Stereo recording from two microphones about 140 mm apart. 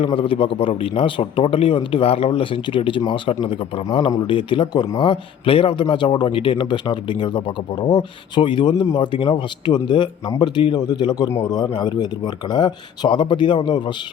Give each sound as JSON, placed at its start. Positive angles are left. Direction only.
{"t": 0.0, "sound": "a man's voice", "side_deg": 40}